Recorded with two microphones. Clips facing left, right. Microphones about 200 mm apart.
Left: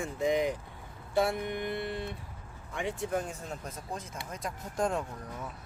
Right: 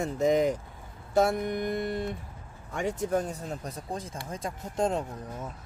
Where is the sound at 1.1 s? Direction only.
45° right (ahead or behind).